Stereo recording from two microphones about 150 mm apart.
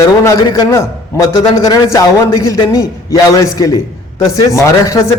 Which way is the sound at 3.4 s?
20° left (ahead or behind).